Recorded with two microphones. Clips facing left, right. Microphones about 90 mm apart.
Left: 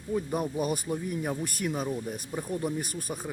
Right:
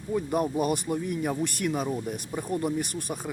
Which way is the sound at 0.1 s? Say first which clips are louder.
Right 3 dB; 5° right (ahead or behind).